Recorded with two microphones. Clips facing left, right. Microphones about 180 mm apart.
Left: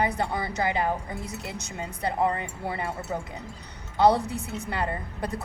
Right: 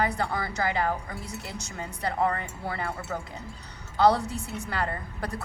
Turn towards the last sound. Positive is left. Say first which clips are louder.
# left 1 dB
turn(degrees=20)  # may be behind; listen again after turning